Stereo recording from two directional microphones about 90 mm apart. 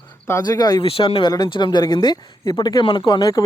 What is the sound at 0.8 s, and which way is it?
Speech, 90° left.